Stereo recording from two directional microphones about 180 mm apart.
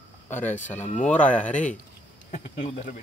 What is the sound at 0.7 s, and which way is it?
Speech, 5° left (ahead or behind).